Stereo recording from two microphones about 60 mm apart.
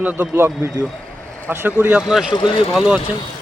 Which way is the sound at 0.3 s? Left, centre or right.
Right.